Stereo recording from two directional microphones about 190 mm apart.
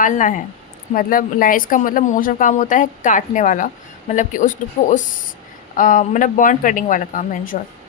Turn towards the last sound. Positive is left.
turn(degrees=45)  # may be behind; listen again after turning